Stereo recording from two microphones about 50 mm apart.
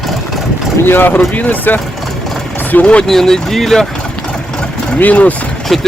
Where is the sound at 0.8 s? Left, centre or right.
Left.